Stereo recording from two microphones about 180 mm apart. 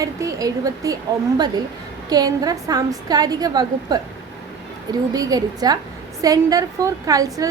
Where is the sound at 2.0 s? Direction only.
20° right (ahead or behind).